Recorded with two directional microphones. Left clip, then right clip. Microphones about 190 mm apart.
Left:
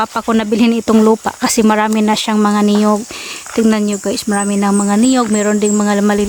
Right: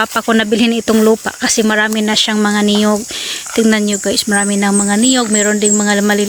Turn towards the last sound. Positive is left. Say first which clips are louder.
# right 1 dB
turn(degrees=5)  # may be behind; listen again after turning